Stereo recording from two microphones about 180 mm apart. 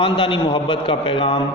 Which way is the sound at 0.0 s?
30° left (ahead or behind).